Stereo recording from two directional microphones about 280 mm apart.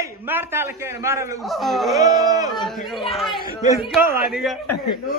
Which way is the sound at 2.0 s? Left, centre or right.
Centre.